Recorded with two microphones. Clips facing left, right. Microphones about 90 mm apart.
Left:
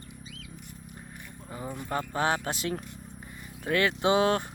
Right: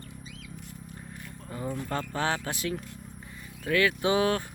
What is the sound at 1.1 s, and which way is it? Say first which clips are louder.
Speech: right 2 dB; 15° left (ahead or behind).